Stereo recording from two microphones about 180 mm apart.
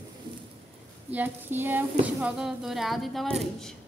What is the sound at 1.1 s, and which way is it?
Speech, 10° right (ahead or behind).